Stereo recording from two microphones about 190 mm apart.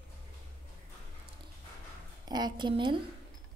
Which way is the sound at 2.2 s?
20° right (ahead or behind).